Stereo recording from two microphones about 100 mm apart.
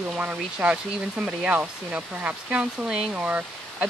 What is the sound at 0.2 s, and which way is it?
Speech, 15° right (ahead or behind).